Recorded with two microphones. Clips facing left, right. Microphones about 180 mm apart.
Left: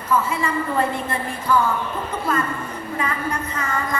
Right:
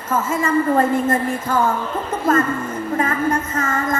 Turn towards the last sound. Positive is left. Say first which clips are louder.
# right 4 dB
turn(degrees=-45)  # may be behind; listen again after turning